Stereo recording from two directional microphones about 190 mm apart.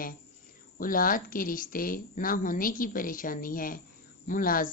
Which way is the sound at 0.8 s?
45° left (ahead or behind).